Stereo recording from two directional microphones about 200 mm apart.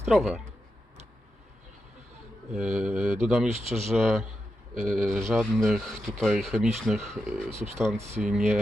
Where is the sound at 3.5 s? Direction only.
35° right (ahead or behind).